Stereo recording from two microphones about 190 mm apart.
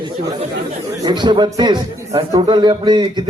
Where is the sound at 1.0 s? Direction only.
20° right (ahead or behind).